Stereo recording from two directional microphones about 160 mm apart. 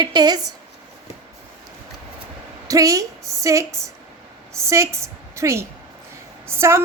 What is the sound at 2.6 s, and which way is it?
A woman's voice, 20° right (ahead or behind).